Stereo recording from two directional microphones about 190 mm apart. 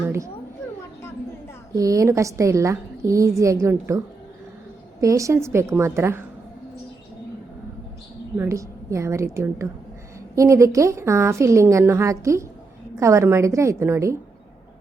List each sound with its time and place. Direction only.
1.7 s a woman's voice: 15° right (ahead or behind)
8.4 s a woman's voice: 15° right (ahead or behind)